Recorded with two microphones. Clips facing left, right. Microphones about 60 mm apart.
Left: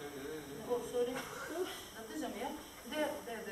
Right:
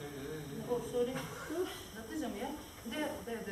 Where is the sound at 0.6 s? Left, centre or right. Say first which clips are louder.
Right 1 dB; centre.